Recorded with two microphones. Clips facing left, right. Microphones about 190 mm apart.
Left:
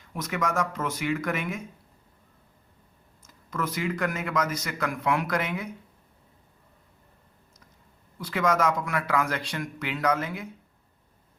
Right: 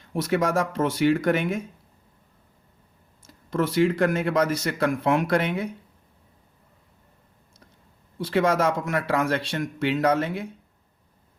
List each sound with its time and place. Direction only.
0.1 s speech: 35° right (ahead or behind)
3.2 s speech: 30° right (ahead or behind)
8.2 s speech: 30° right (ahead or behind)